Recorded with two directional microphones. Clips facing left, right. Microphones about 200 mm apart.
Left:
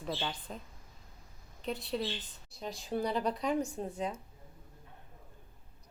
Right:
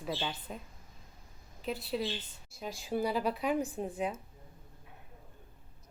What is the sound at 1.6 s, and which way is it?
A woman's voice, 5° right (ahead or behind).